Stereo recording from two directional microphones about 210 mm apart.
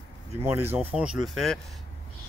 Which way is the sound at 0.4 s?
10° right (ahead or behind).